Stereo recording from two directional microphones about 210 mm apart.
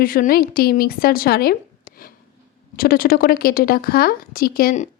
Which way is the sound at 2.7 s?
45° left (ahead or behind).